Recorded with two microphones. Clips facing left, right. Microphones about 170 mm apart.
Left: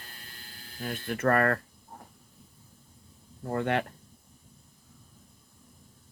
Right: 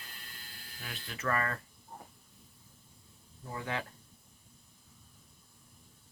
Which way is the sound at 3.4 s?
60° left (ahead or behind).